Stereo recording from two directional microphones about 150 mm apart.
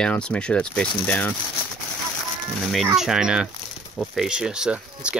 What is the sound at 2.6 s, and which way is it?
Speech, centre (ahead or behind).